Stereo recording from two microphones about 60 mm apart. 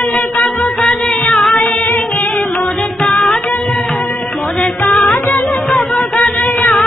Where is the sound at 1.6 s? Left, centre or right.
Centre.